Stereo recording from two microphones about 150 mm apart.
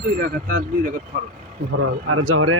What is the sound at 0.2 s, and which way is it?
Speech, 65° right (ahead or behind).